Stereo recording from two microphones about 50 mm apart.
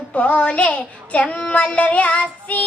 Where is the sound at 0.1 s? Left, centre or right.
Left.